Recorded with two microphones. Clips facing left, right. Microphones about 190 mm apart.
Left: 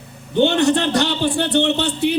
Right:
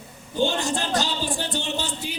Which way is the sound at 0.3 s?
65° left (ahead or behind).